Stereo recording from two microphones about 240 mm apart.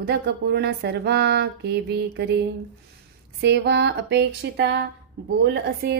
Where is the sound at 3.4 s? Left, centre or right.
Right.